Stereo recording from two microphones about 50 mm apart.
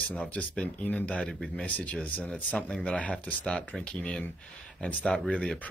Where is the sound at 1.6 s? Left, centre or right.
Left.